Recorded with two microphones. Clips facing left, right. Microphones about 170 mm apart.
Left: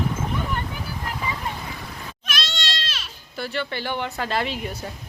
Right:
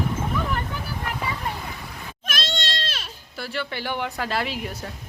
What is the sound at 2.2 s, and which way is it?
Cat, 50° right (ahead or behind).